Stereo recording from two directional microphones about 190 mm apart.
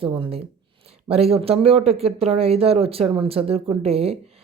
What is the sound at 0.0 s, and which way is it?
Speech, 30° right (ahead or behind).